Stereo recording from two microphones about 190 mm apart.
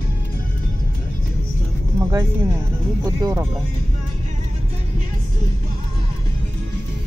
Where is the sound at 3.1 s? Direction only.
20° right (ahead or behind).